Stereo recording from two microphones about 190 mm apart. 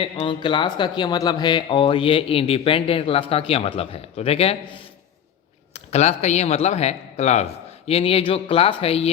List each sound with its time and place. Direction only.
0.0 s speech: 25° left (ahead or behind)
5.7 s speech: 35° left (ahead or behind)